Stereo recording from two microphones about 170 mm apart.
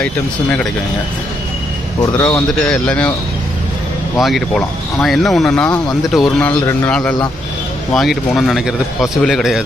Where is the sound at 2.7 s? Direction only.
5° left (ahead or behind).